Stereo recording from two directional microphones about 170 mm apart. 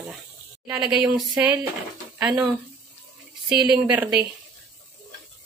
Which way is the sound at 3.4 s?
5° right (ahead or behind).